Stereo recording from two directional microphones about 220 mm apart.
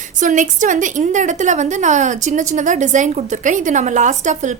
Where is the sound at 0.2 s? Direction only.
35° right (ahead or behind).